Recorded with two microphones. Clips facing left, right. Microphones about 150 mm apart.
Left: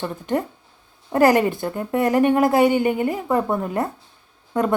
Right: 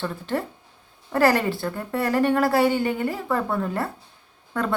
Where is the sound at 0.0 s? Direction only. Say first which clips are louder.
Left 3 dB; 20° left (ahead or behind).